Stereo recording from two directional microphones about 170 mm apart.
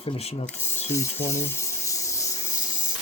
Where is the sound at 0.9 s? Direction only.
15° left (ahead or behind).